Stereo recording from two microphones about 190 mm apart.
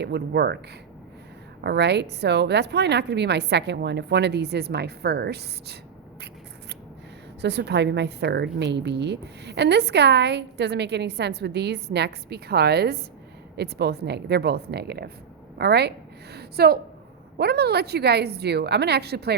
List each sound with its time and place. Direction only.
0.0 s a woman's voice: 60° right (ahead or behind)
1.6 s a woman's voice: 60° right (ahead or behind)
7.4 s a woman's voice: 65° right (ahead or behind)